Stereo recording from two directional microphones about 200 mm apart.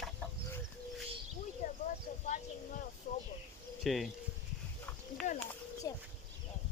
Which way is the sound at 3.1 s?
40° left (ahead or behind).